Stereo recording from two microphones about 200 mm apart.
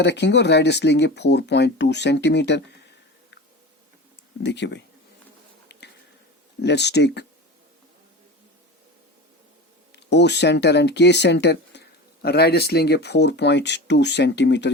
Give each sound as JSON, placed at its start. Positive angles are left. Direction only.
{"t": 0.0, "sound": "speech", "side_deg": 60}
{"t": 4.4, "sound": "speech", "side_deg": 60}
{"t": 6.6, "sound": "speech", "side_deg": 55}
{"t": 9.9, "sound": "speech", "side_deg": 60}